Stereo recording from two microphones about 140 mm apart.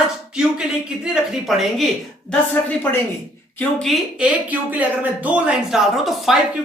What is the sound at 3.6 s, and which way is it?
Speech, 5° left (ahead or behind).